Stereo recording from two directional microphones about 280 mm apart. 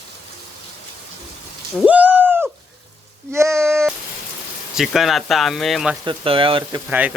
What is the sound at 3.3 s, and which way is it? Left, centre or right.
Speech, centre.